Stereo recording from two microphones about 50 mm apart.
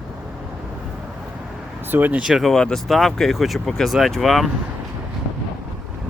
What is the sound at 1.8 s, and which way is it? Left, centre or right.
Vehicle, right.